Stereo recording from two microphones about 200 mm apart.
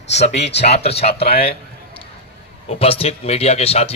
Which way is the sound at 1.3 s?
50° left (ahead or behind).